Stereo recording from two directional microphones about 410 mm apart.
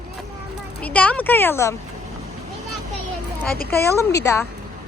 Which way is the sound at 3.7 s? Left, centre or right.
Centre.